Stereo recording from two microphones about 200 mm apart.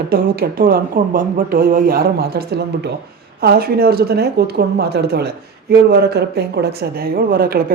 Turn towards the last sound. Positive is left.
turn(degrees=-50)  # may be behind; listen again after turning